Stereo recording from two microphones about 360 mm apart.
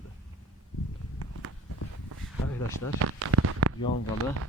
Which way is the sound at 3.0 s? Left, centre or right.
Right.